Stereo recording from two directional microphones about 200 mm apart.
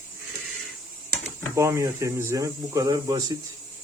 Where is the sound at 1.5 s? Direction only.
15° right (ahead or behind).